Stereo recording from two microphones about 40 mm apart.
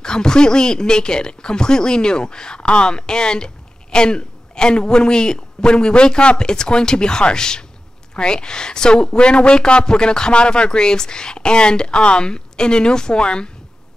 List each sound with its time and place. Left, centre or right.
0.0 s speech: centre